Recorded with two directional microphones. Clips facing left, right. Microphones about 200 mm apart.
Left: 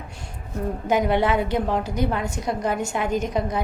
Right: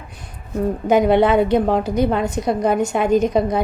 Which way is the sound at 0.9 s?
20° right (ahead or behind).